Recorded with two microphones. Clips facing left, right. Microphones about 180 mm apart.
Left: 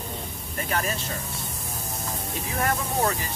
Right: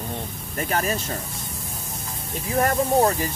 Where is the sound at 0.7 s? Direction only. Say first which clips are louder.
Right 3 dB; 40° right (ahead or behind).